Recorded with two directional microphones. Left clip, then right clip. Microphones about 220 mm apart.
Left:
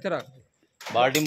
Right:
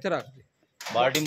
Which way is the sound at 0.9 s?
45° left (ahead or behind).